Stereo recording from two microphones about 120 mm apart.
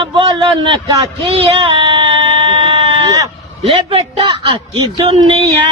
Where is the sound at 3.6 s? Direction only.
55° right (ahead or behind).